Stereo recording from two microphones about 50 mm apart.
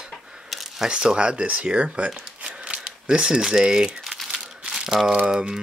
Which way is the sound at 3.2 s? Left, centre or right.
Centre.